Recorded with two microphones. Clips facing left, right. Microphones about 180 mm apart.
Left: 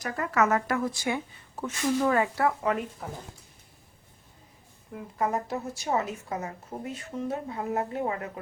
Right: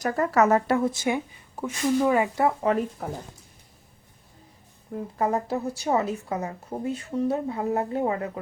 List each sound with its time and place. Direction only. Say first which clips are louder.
0.0 s speech: right 5 dB; 40° right (ahead or behind); by 2.7 s 25° right (ahead or behind)
4.9 s a woman's voice: right 4 dB; 35° right (ahead or behind)